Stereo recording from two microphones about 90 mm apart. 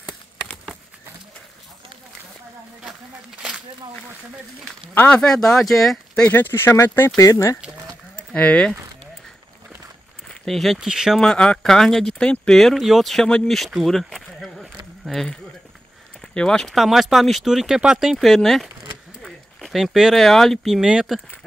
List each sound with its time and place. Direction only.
4.9 s speech: 15° left (ahead or behind)
6.2 s speech: 20° left (ahead or behind)
7.2 s speech: 35° left (ahead or behind)
8.2 s speech: 15° left (ahead or behind)
10.2 s speech: 5° left (ahead or behind)
11.1 s speech: 10° left (ahead or behind)
13.7 s a sound: centre (ahead or behind)
15.0 s speech: 5° left (ahead or behind)